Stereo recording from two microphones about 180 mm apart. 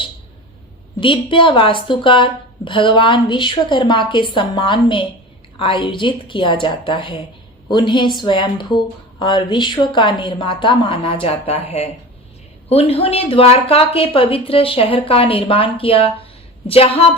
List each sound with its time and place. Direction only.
0.9 s a woman's voice: 30° left (ahead or behind)